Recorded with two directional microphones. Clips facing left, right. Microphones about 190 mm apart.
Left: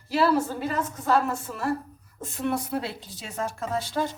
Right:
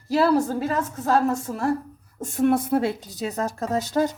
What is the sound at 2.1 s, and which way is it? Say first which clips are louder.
A woman's voice: right 8 dB; 50° right (ahead or behind).